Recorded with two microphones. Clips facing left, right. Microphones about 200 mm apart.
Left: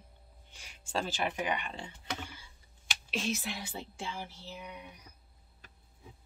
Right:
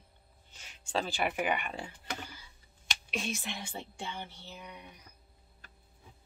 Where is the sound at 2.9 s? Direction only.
5° left (ahead or behind).